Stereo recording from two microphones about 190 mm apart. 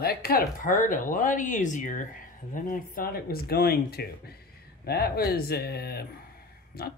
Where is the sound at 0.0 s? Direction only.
55° left (ahead or behind).